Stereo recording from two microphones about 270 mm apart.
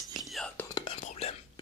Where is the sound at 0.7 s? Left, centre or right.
Left.